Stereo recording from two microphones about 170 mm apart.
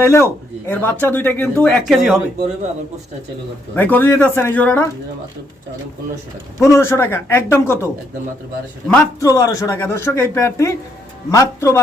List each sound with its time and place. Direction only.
0.0 s speech: 15° left (ahead or behind)
1.8 s speech: centre (ahead or behind)
3.8 s speech: 10° left (ahead or behind)
6.6 s speech: 15° left (ahead or behind)
8.9 s speech: 15° left (ahead or behind)